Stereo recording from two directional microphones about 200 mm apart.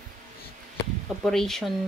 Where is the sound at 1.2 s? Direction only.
Centre (ahead or behind).